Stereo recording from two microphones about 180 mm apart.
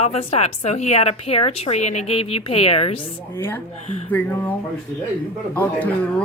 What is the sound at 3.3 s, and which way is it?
Speech, 10° left (ahead or behind).